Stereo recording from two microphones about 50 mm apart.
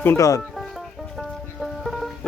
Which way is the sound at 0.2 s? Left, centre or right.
Left.